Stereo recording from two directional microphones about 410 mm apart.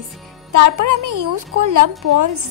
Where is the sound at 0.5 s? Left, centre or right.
Right.